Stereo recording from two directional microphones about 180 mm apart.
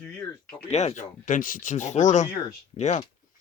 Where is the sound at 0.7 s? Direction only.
40° left (ahead or behind).